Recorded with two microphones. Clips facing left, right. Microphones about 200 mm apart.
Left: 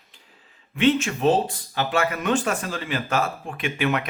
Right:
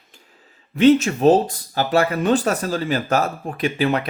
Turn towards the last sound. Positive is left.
turn(degrees=-35)  # may be behind; listen again after turning